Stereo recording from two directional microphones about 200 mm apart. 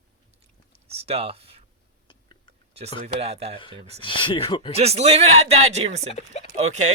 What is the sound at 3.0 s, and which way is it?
A man's voice, 30° right (ahead or behind).